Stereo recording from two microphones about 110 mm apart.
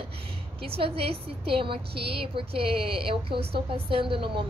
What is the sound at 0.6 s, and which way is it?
A woman's voice, 60° right (ahead or behind).